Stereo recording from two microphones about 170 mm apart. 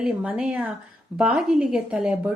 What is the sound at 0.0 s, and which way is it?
Speech, 5° right (ahead or behind).